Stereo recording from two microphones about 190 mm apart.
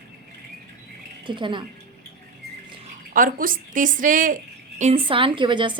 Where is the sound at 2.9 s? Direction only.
45° right (ahead or behind).